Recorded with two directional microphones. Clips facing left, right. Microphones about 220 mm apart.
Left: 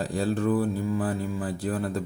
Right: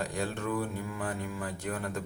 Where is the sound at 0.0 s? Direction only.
35° left (ahead or behind).